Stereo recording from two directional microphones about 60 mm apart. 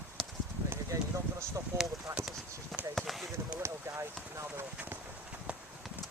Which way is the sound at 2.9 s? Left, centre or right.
Centre.